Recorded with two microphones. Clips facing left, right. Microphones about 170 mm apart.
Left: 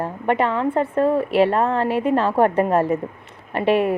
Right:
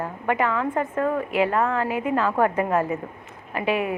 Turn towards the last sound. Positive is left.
turn(degrees=35)  # may be behind; listen again after turning